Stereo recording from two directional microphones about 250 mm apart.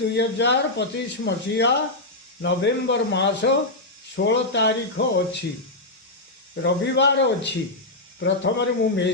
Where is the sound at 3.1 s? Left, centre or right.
Left.